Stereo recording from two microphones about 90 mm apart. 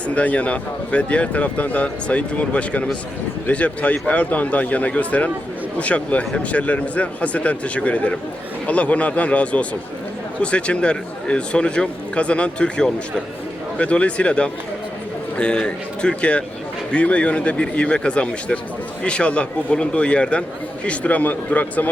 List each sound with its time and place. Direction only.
0.1 s speech: 15° left (ahead or behind)